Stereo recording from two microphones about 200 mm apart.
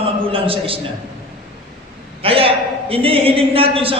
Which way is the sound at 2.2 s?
30° right (ahead or behind).